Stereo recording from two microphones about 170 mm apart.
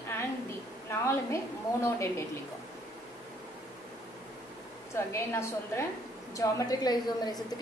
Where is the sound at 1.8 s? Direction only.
15° left (ahead or behind).